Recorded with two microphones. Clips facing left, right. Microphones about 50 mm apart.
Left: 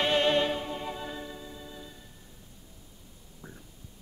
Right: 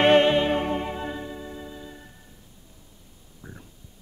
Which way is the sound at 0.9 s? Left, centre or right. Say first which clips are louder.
Right 5 dB; right.